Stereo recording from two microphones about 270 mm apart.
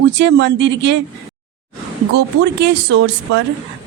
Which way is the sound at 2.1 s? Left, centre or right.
Right.